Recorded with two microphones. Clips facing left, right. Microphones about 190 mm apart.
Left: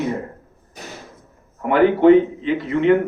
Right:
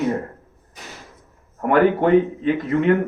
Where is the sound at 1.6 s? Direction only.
45° right (ahead or behind).